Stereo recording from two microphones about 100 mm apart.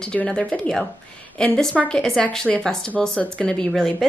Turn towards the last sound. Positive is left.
turn(degrees=0)  # may be behind; listen again after turning